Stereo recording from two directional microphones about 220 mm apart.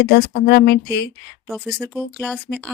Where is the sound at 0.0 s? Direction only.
45° left (ahead or behind).